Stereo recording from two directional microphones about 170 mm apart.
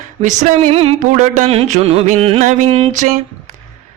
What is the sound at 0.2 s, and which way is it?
Speech, 45° right (ahead or behind).